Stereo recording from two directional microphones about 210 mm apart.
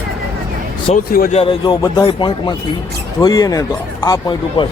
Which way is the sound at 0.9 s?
30° left (ahead or behind).